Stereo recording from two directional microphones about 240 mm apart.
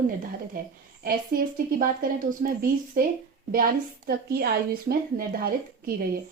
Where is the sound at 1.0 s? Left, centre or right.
Right.